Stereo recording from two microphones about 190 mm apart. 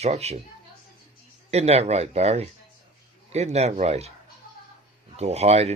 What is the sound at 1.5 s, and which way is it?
Speech, 35° right (ahead or behind).